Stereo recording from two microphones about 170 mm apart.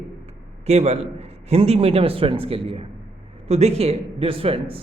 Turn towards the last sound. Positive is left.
turn(degrees=-35)  # may be behind; listen again after turning